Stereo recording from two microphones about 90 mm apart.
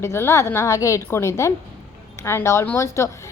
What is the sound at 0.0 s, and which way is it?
A woman's voice, 30° left (ahead or behind).